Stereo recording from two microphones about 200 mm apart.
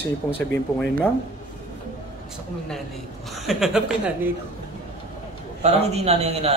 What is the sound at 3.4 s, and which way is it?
Speech, centre (ahead or behind).